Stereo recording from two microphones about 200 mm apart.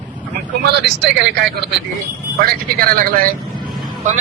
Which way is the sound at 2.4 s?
45° right (ahead or behind).